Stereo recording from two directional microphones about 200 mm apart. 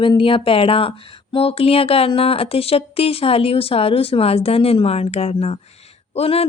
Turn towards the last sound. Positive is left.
turn(degrees=30)  # may be behind; listen again after turning